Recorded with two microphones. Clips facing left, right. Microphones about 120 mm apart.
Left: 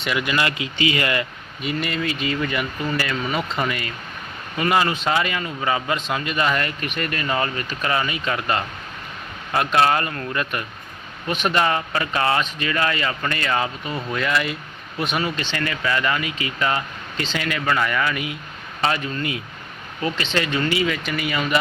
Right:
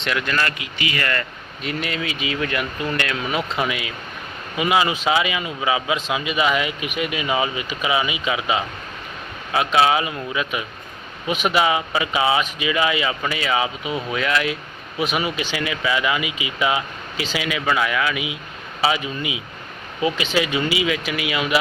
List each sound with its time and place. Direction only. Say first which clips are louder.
0.0 s speech: even; 5° left (ahead or behind)
0.4 s speech: left 4 dB; 25° left (ahead or behind)
1.6 s speech: left 2 dB; centre (ahead or behind)